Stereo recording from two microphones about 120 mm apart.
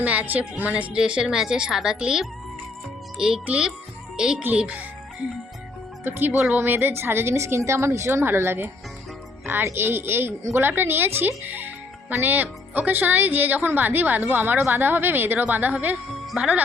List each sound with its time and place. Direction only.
0.0 s a woman's voice: 15° right (ahead or behind)
6.1 s a woman's voice: 15° right (ahead or behind)
16.2 s speech: 5° right (ahead or behind)